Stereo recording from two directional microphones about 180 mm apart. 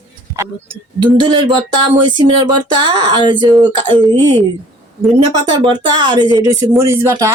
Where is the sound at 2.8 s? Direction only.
25° right (ahead or behind).